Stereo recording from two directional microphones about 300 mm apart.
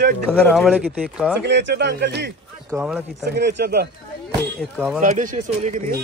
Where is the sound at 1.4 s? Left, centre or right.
Right.